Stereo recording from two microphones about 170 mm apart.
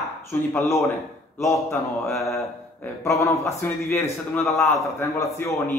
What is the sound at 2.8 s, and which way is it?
A man's voice, 15° left (ahead or behind).